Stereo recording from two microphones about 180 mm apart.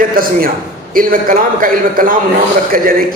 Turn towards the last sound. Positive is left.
turn(degrees=-55)  # may be behind; listen again after turning